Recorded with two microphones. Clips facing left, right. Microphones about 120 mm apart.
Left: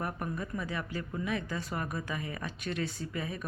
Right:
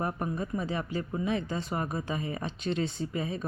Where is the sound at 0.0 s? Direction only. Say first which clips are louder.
Right 4 dB; 25° right (ahead or behind).